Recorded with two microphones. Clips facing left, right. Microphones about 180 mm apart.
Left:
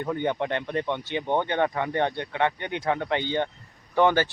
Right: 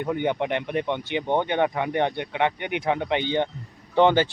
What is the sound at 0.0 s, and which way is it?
Speech, 15° right (ahead or behind).